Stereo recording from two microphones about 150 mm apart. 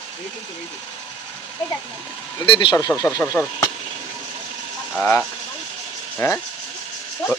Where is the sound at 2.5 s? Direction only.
30° left (ahead or behind).